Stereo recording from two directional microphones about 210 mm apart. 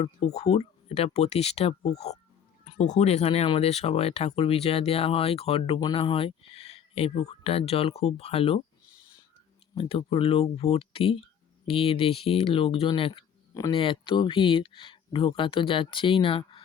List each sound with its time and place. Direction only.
0.0 s speech: 30° left (ahead or behind)
9.7 s speech: 25° left (ahead or behind)